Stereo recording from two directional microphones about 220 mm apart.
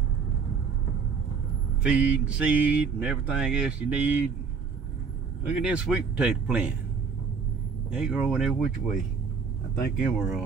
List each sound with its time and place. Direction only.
1.8 s speech: 5° right (ahead or behind)
5.5 s speech: 5° right (ahead or behind)
7.9 s speech: 5° right (ahead or behind)
9.9 s speech: centre (ahead or behind)